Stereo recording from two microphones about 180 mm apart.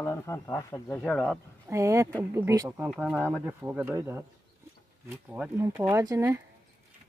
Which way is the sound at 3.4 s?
15° right (ahead or behind).